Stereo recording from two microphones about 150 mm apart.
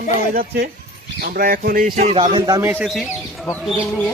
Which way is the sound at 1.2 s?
75° right (ahead or behind).